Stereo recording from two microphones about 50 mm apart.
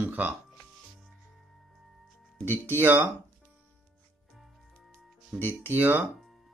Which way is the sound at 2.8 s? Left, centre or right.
Right.